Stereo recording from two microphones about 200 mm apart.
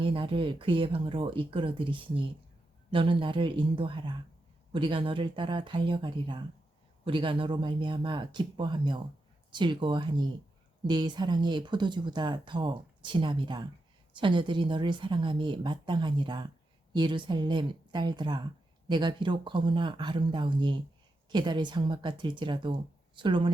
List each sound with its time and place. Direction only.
0.0 s speech: 25° right (ahead or behind)